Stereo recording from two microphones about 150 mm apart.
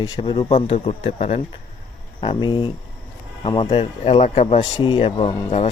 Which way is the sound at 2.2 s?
30° left (ahead or behind).